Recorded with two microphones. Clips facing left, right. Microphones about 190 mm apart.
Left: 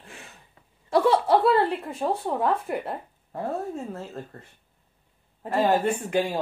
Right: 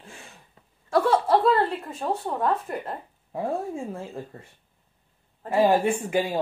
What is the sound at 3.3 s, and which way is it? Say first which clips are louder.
Speech: right 1 dB; 10° right (ahead or behind).